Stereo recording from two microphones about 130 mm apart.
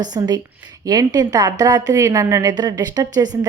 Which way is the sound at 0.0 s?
30° right (ahead or behind).